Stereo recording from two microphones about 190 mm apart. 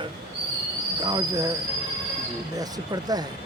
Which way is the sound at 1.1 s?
20° right (ahead or behind).